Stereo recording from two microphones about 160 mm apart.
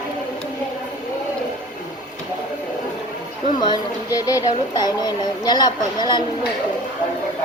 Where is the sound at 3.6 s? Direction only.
25° left (ahead or behind).